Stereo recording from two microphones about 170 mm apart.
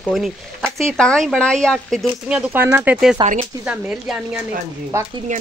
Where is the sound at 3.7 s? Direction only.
5° right (ahead or behind).